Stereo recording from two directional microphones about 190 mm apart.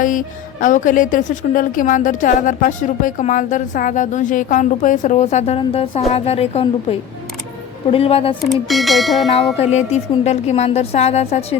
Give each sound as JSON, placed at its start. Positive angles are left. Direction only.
{"t": 0.0, "sound": "a woman's voice", "side_deg": 45}
{"t": 7.9, "sound": "speech", "side_deg": 30}
{"t": 8.4, "sound": "speech", "side_deg": 0}
{"t": 9.7, "sound": "a woman's voice", "side_deg": 35}